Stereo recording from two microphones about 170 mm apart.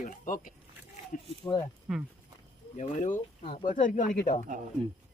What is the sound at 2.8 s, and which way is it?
Speech, 45° left (ahead or behind).